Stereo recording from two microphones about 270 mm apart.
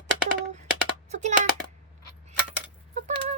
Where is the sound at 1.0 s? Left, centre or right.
Right.